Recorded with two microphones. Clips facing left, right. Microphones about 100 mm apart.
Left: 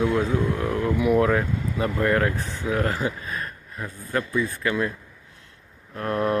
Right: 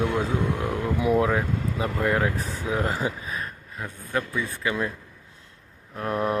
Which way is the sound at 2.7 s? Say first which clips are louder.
Left 2 dB; 20° right (ahead or behind).